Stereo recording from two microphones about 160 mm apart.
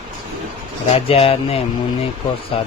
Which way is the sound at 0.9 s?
35° left (ahead or behind).